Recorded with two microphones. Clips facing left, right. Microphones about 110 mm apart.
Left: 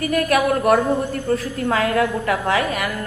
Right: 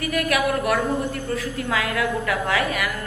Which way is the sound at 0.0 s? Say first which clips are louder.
Left 4 dB; 35° left (ahead or behind).